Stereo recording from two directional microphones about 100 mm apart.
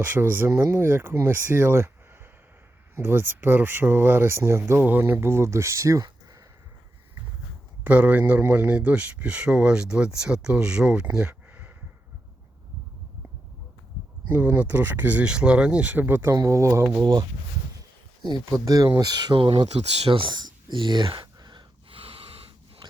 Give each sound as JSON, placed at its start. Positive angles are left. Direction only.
{"t": 0.0, "sound": "speech", "side_deg": -20}
{"t": 2.9, "sound": "speech", "side_deg": -25}
{"t": 7.9, "sound": "a man's voice", "side_deg": -15}
{"t": 14.3, "sound": "a man's voice", "side_deg": -15}
{"t": 16.3, "sound": "speech", "side_deg": -30}
{"t": 17.0, "sound": "speech", "side_deg": -45}
{"t": 18.6, "sound": "speech", "side_deg": -35}
{"t": 19.4, "sound": "speech", "side_deg": -60}
{"t": 21.8, "sound": "snort", "side_deg": -70}